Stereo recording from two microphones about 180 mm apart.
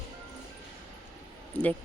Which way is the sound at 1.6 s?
5° left (ahead or behind).